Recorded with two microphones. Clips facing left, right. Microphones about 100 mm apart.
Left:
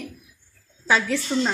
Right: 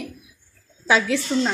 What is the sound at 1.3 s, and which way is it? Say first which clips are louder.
Speech: right 1 dB; 5° left (ahead or behind).